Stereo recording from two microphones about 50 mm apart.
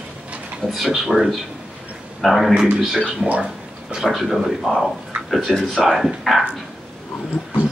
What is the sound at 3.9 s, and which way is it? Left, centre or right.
A man's voice, centre.